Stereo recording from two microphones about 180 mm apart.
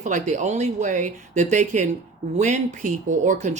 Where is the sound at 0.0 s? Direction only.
45° right (ahead or behind).